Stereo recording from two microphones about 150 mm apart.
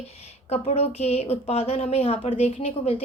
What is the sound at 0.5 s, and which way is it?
A woman's voice, 45° left (ahead or behind).